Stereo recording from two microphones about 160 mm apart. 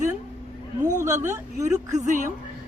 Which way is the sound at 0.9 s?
50° right (ahead or behind).